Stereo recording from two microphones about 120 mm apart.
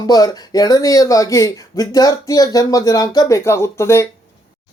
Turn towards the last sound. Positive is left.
turn(degrees=20)  # may be behind; listen again after turning